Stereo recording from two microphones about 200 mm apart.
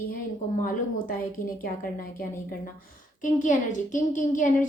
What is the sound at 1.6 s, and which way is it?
A woman's voice, 45° left (ahead or behind).